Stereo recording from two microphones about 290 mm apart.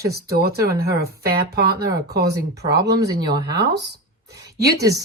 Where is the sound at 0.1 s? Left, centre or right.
Right.